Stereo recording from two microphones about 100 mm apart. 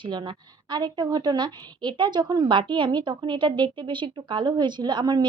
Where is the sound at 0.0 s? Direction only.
50° right (ahead or behind).